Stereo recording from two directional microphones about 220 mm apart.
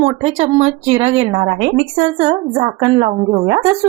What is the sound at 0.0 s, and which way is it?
Speech, 25° right (ahead or behind).